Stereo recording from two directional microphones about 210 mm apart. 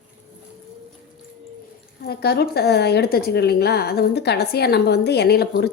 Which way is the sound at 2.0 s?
50° left (ahead or behind).